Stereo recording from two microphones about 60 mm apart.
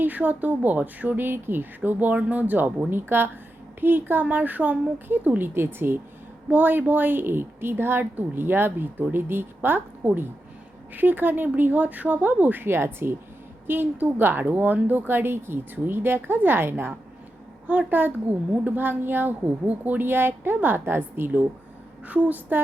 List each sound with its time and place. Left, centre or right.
0.0 s a woman's voice: right
17.7 s a woman's voice: right